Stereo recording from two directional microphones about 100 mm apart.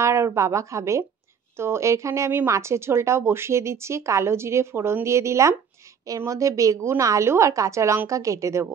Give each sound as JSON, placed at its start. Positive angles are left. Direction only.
{"t": 0.0, "sound": "a woman's voice", "side_deg": -30}